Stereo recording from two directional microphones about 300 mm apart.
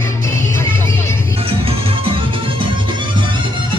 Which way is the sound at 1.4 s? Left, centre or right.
Centre.